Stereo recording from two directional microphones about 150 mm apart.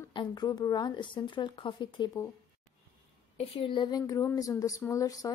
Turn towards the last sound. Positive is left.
turn(degrees=25)  # may be behind; listen again after turning